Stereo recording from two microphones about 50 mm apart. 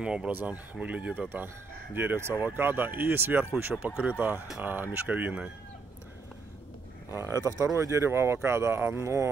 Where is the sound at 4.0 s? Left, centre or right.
Right.